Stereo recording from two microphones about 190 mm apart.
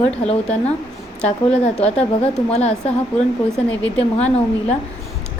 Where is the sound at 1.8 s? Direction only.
35° left (ahead or behind).